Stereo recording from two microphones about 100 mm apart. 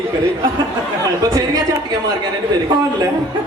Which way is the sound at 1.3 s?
35° right (ahead or behind).